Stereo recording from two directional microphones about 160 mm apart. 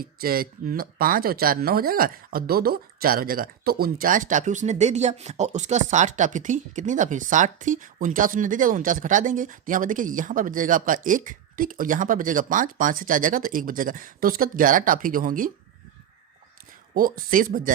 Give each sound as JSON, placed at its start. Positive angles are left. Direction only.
{"t": 0.0, "sound": "speech", "side_deg": -65}
{"t": 16.9, "sound": "speech", "side_deg": -60}